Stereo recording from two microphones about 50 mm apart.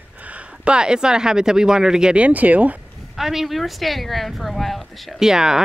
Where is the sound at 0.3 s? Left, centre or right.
Centre.